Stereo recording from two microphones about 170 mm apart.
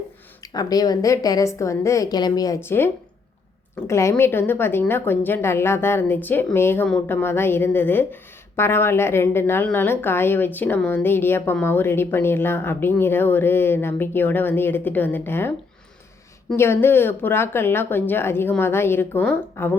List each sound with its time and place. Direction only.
0.4 s a woman's voice: 20° left (ahead or behind)
16.6 s a woman's voice: 15° left (ahead or behind)